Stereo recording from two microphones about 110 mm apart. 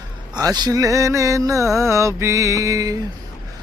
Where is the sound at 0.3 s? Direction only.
40° right (ahead or behind).